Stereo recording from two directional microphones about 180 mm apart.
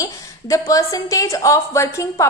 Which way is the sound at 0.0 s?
20° left (ahead or behind).